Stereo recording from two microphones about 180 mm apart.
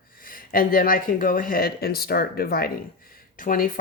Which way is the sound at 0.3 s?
50° left (ahead or behind).